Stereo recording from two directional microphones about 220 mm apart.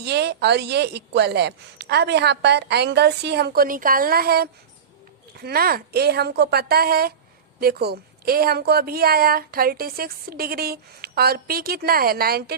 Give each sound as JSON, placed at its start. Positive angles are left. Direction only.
{"t": 0.0, "sound": "a woman's voice", "side_deg": -50}